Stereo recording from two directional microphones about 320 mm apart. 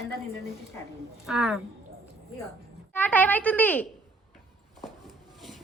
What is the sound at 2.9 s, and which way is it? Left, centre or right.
Speech, centre.